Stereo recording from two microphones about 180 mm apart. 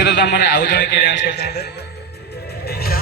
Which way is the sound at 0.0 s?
65° left (ahead or behind).